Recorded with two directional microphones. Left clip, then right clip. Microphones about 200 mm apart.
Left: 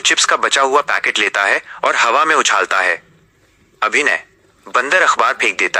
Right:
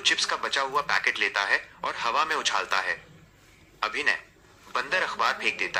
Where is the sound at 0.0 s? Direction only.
50° left (ahead or behind).